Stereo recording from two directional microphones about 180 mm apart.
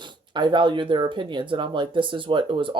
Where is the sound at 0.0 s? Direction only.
25° right (ahead or behind).